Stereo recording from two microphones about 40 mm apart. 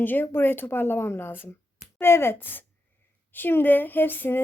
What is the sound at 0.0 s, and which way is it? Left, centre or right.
Speech, left.